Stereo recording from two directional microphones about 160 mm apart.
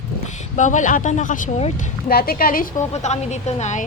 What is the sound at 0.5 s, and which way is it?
Speech, 50° left (ahead or behind).